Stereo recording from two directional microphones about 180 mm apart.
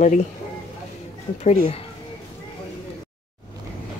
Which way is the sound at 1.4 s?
35° left (ahead or behind).